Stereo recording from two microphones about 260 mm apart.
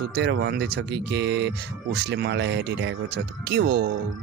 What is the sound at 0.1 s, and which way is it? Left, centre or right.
Speech, right.